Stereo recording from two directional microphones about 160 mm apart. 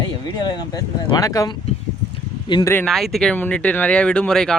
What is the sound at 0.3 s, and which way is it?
A man's voice, 25° left (ahead or behind).